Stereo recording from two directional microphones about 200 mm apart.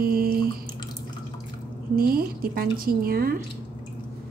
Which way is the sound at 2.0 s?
50° right (ahead or behind).